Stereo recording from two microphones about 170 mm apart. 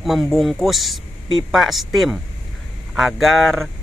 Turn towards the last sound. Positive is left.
turn(degrees=0)  # may be behind; listen again after turning